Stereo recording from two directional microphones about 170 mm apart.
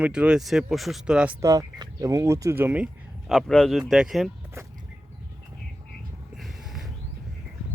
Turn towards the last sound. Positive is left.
turn(degrees=0)  # may be behind; listen again after turning